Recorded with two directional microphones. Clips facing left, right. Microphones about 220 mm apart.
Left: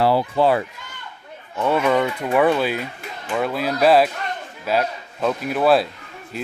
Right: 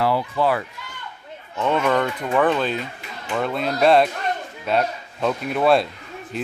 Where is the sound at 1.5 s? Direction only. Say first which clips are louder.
Left 2 dB; 10° left (ahead or behind).